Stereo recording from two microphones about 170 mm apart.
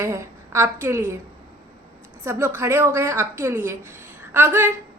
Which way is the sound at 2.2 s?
15° right (ahead or behind).